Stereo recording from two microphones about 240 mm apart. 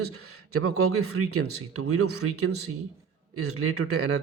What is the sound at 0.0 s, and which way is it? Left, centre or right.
Speech, right.